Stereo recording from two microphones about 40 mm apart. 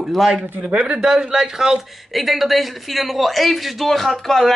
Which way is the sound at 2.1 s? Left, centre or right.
Centre.